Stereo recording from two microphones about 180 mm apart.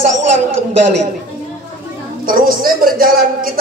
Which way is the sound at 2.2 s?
50° right (ahead or behind).